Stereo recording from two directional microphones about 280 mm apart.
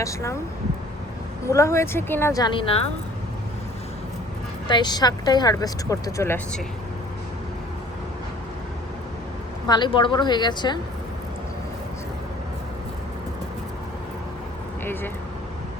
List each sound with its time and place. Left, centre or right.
0.0 s speech: centre
1.5 s speech: centre
4.7 s speech: centre
9.6 s speech: centre